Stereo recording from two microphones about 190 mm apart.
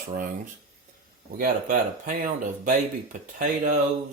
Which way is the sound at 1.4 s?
45° right (ahead or behind).